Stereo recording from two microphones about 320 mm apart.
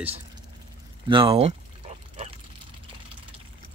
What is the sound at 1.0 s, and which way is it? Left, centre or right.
Pour, centre.